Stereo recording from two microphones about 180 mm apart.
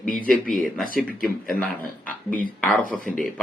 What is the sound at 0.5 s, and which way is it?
Speech, centre (ahead or behind).